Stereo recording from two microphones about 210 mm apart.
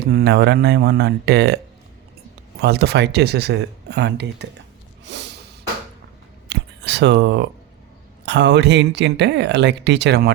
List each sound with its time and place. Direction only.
0.0 s speech: 50° right (ahead or behind)
2.6 s speech: 50° right (ahead or behind)
5.0 s snort: 55° right (ahead or behind)
6.5 s a sound: 55° right (ahead or behind)
8.2 s speech: 55° right (ahead or behind)